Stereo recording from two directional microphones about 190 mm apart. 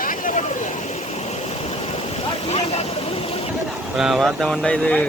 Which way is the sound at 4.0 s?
Centre (ahead or behind).